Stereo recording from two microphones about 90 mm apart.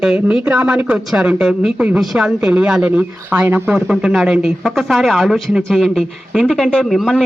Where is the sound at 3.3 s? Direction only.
20° right (ahead or behind).